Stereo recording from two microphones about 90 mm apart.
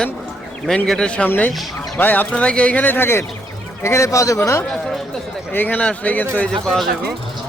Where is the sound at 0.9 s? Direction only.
10° left (ahead or behind); by 4.4 s 35° left (ahead or behind).